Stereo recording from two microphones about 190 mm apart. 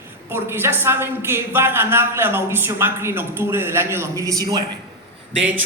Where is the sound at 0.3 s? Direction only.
10° right (ahead or behind).